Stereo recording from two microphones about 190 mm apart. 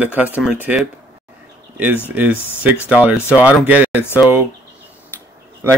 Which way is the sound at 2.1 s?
10° right (ahead or behind).